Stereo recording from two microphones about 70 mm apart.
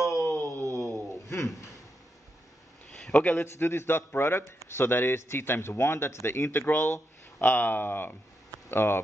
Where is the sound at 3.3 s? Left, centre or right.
Left.